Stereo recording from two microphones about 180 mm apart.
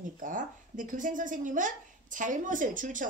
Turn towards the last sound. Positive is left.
turn(degrees=-45)  # may be behind; listen again after turning